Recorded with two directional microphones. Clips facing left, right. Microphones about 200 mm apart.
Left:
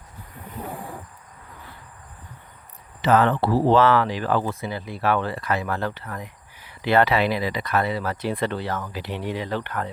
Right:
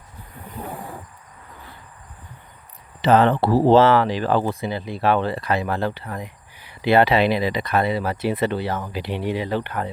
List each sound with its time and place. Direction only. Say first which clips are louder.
3.0 s speech: right 3 dB; 30° right (ahead or behind)
6.8 s speech: right 3 dB; 15° right (ahead or behind)
7.2 s speech: right 4 dB; 25° right (ahead or behind); by 8.8 s 10° right (ahead or behind)
8.8 s speech: right 4 dB; 20° right (ahead or behind)